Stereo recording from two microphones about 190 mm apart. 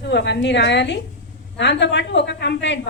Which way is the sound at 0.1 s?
65° left (ahead or behind).